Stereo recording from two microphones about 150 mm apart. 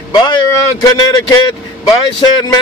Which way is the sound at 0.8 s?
25° left (ahead or behind).